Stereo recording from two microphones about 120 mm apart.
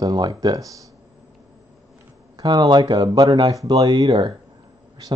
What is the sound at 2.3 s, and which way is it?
Speech, 35° right (ahead or behind).